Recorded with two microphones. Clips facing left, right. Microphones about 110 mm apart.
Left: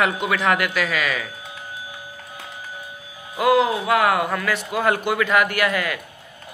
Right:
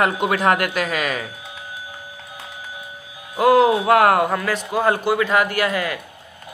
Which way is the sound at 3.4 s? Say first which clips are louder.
Right 4 dB; 40° right (ahead or behind).